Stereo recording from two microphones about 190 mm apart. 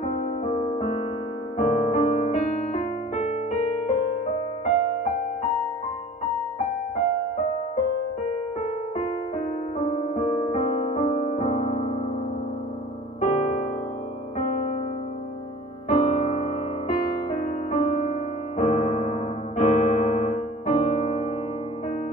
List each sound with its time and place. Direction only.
0.0 s music: 35° left (ahead or behind)
9.8 s music: 35° left (ahead or behind)
13.2 s electric piano: 35° left (ahead or behind)
14.4 s music: 35° left (ahead or behind)
15.9 s music: 35° left (ahead or behind)
18.6 s piano: 40° left (ahead or behind)